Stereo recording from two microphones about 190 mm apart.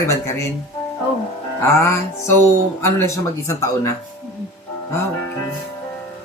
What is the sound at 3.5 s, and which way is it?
Speech, 15° left (ahead or behind).